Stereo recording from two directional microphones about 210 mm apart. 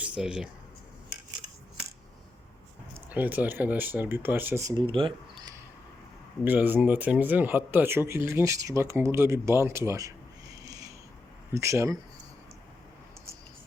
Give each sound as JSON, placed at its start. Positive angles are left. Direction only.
{"t": 0.0, "sound": "speech", "side_deg": -5}
{"t": 2.9, "sound": "speech", "side_deg": -10}
{"t": 6.4, "sound": "speech", "side_deg": -10}
{"t": 10.7, "sound": "a sound", "side_deg": -15}
{"t": 11.5, "sound": "speech", "side_deg": -15}